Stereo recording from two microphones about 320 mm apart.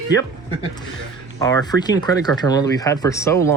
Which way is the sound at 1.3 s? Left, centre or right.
Centre.